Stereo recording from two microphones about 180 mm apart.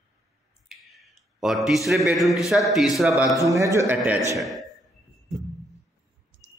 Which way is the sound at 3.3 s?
15° right (ahead or behind).